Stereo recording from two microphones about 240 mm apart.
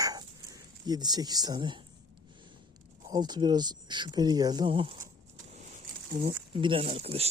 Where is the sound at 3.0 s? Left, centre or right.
Centre.